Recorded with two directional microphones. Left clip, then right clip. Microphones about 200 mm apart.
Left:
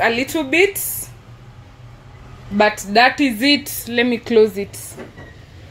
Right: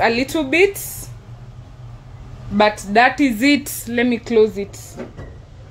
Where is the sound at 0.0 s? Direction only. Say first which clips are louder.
Even; centre (ahead or behind).